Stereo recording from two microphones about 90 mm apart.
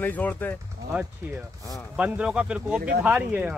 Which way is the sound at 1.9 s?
15° right (ahead or behind).